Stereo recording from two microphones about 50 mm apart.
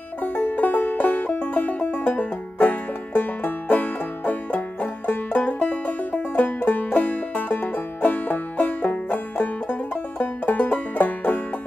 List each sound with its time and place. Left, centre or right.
0.2 s music: left
1.5 s banjo: left
5.6 s music: left